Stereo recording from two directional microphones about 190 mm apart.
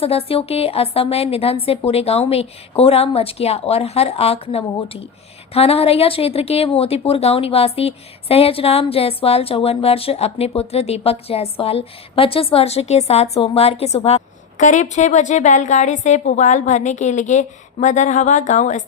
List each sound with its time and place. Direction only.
0.0 s a woman's voice: 30° left (ahead or behind)